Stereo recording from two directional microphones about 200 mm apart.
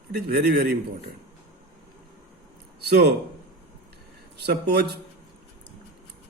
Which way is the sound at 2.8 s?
55° right (ahead or behind).